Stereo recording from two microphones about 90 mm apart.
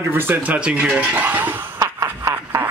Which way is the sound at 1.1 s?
20° right (ahead or behind).